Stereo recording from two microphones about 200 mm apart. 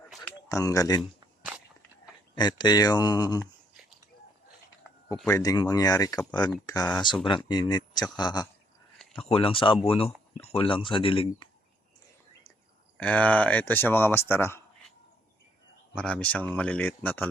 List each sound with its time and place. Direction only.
0.2 s speech: 15° left (ahead or behind)
2.3 s speech: 20° left (ahead or behind)
5.2 s speech: 15° left (ahead or behind)
13.0 s speech: 5° left (ahead or behind)
16.0 s speech: 5° left (ahead or behind)